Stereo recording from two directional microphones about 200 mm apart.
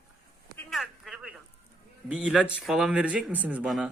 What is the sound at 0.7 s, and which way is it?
Telephone, centre (ahead or behind).